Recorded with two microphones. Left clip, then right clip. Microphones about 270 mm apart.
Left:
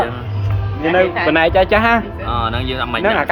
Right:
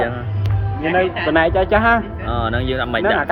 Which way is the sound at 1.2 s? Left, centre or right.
Left.